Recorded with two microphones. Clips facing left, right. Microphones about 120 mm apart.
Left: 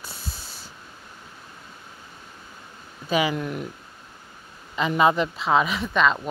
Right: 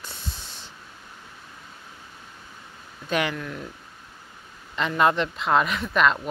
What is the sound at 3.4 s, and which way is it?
Speech, 20° left (ahead or behind).